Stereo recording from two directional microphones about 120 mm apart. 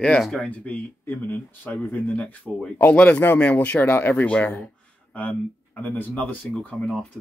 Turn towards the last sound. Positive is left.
turn(degrees=10)  # may be behind; listen again after turning